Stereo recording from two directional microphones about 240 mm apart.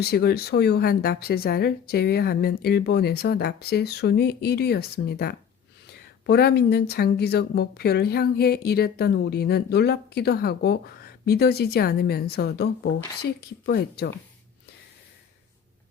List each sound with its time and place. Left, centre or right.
0.0 s speech: left